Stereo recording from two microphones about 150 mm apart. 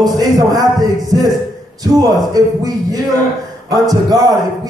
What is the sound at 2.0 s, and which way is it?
A man's voice, 25° right (ahead or behind).